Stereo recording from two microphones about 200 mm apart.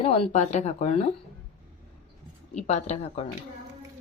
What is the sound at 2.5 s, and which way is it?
Speech, 35° left (ahead or behind).